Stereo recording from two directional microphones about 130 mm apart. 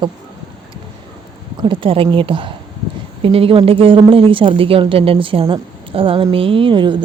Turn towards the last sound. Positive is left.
turn(degrees=-40)  # may be behind; listen again after turning